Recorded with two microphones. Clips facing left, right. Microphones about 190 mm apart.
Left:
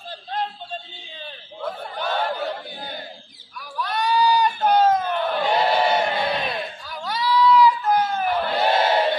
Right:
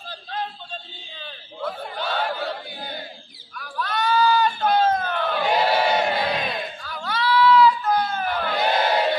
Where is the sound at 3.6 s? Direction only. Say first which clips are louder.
Even; 15° left (ahead or behind).